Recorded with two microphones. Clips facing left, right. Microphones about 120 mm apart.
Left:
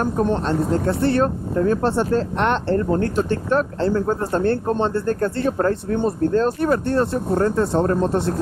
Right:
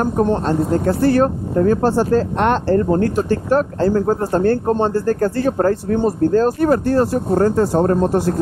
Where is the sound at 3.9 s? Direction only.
35° right (ahead or behind).